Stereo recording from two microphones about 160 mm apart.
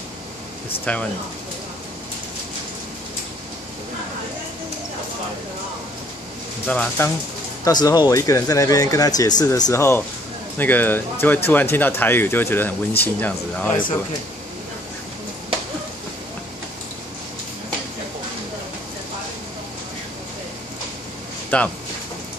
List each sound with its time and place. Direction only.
0.9 s speech: 5° left (ahead or behind)
6.7 s speech: 10° left (ahead or behind)
7.6 s speech: 25° left (ahead or behind)
21.5 s speech: 10° left (ahead or behind)